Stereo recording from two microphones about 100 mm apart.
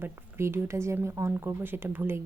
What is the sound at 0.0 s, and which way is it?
Speech, 25° right (ahead or behind).